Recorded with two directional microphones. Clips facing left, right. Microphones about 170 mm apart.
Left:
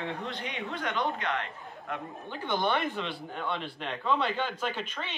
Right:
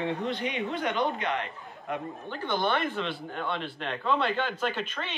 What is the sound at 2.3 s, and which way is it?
Speech, 15° left (ahead or behind).